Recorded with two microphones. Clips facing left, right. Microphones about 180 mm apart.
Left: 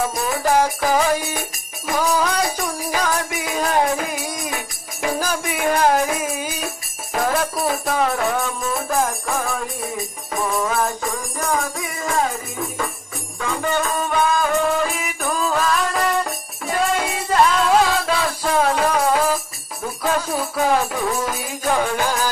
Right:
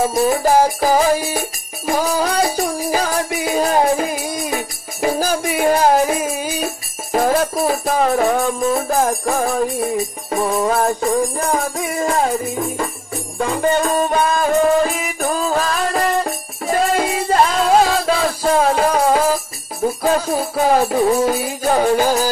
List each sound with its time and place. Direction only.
0.0 s music: 30° right (ahead or behind)
13.4 s music: 35° right (ahead or behind)